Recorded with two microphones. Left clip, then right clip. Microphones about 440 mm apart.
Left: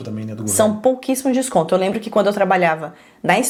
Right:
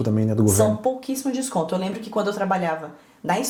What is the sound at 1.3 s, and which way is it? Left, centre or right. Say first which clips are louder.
A woman's voice: left 8 dB; left.